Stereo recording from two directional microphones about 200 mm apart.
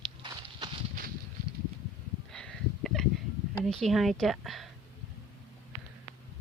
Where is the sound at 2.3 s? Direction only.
5° left (ahead or behind).